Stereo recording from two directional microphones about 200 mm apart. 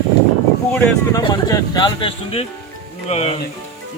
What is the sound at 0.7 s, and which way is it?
Speech, 10° left (ahead or behind).